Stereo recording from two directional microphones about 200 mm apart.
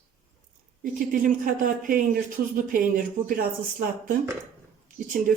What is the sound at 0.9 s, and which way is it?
Speech, 45° right (ahead or behind).